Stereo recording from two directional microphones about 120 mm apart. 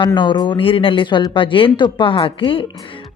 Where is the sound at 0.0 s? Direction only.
40° left (ahead or behind).